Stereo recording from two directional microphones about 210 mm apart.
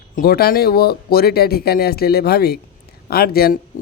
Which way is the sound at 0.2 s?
45° left (ahead or behind).